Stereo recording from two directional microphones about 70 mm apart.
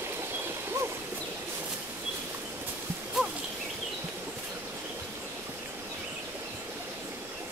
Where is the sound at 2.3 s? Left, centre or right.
Right.